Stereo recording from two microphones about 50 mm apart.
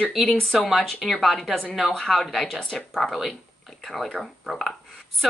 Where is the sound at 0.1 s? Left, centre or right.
Centre.